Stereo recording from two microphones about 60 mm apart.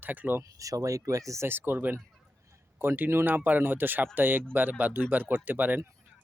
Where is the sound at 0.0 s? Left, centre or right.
Right.